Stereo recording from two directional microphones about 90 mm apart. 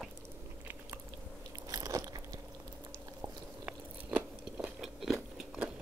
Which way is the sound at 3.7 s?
15° right (ahead or behind).